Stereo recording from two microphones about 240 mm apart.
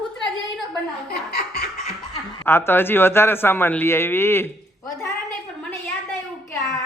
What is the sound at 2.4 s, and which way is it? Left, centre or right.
Speech, centre.